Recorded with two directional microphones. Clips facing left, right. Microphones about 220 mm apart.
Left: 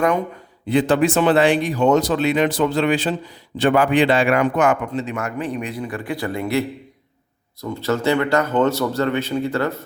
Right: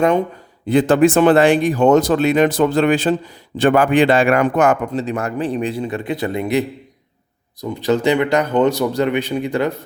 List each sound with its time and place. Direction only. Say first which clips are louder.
0.7 s speech: right 4 dB; 45° right (ahead or behind); by 9.7 s 15° right (ahead or behind)